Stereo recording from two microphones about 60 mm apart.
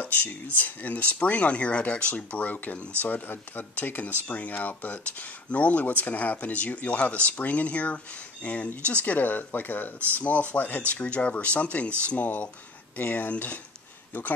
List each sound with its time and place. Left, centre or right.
0.0 s speech: left